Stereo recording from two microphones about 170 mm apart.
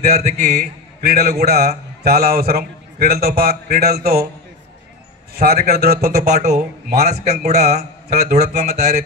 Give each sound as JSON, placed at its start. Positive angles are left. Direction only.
{"t": 0.0, "sound": "a man's voice", "side_deg": -40}
{"t": 0.6, "sound": "a man's voice", "side_deg": -65}
{"t": 5.3, "sound": "a man's voice", "side_deg": -65}
{"t": 6.3, "sound": "a man's voice", "side_deg": -40}
{"t": 8.7, "sound": "a man's voice", "side_deg": -65}